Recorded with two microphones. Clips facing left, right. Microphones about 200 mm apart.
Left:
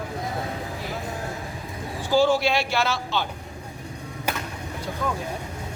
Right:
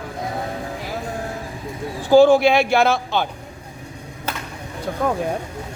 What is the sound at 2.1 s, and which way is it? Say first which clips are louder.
Speech: right 8 dB; 55° right (ahead or behind).